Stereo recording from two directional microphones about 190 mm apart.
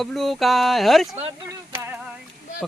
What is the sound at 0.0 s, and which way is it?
Speech, centre (ahead or behind).